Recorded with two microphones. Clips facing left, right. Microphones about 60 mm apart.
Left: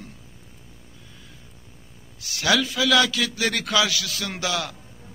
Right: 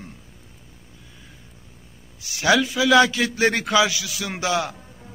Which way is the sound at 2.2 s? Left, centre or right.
Right.